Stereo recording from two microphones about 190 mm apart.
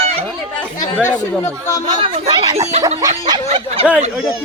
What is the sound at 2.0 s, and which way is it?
Speech, 25° right (ahead or behind).